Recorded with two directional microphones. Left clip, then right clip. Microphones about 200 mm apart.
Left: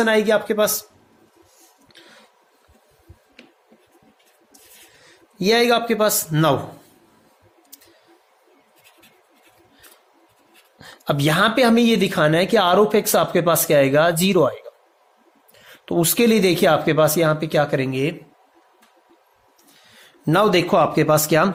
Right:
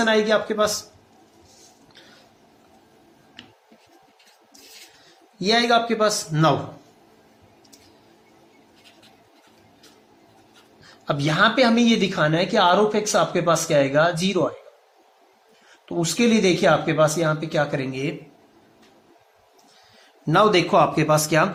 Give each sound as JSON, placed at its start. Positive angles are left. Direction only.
{"t": 0.0, "sound": "speech", "side_deg": 35}
{"t": 5.4, "sound": "speech", "side_deg": 40}
{"t": 10.9, "sound": "speech", "side_deg": 45}
{"t": 15.9, "sound": "speech", "side_deg": 45}
{"t": 20.2, "sound": "speech", "side_deg": 40}